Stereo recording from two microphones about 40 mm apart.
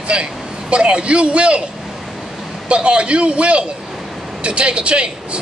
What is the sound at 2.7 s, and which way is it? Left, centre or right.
Speech, right.